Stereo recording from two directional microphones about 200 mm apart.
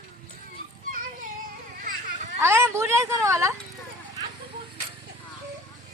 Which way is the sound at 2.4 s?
10° right (ahead or behind).